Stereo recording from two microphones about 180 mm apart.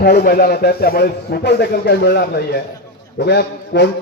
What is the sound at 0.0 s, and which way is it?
A man's voice, 55° left (ahead or behind).